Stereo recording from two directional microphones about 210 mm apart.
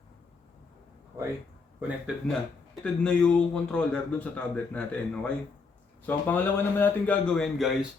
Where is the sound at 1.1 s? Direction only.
10° right (ahead or behind).